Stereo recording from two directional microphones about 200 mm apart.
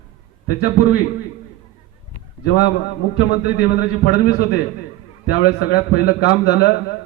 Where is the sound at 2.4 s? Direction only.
50° left (ahead or behind).